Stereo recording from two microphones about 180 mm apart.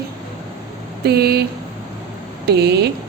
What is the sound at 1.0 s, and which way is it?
Speech, 60° right (ahead or behind).